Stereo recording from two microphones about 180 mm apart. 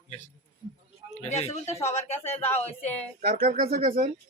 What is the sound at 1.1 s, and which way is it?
Speech, 40° left (ahead or behind).